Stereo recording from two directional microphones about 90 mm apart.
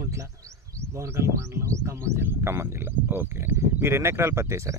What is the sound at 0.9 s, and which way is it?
Speech, 35° right (ahead or behind).